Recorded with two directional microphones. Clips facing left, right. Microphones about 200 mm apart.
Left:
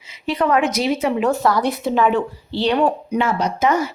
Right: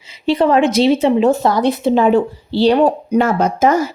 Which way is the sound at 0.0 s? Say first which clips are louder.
Right 6 dB; 30° right (ahead or behind).